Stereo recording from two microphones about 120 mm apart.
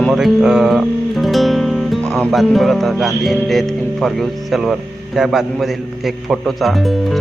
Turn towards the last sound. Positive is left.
turn(degrees=0)  # may be behind; listen again after turning